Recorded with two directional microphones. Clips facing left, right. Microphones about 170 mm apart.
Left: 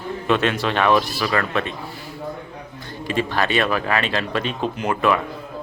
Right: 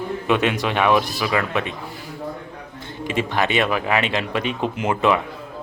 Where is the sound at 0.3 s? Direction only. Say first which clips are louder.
Left 1 dB; 15° right (ahead or behind).